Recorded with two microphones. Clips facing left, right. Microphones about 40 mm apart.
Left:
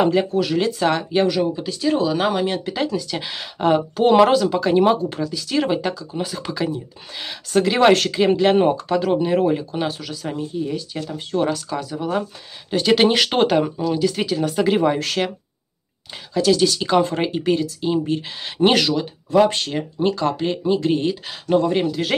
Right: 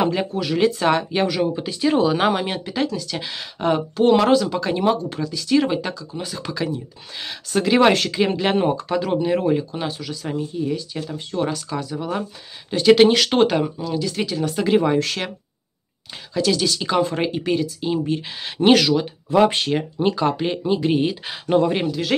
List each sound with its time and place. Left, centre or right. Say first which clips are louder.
0.0 s speech: left 4 dB; centre
1.4 s speech: even; centre
2.6 s speech: left 1 dB; centre
13.1 s speech: even; centre
16.3 s speech: left 3 dB; centre
19.5 s speech: right 3 dB; centre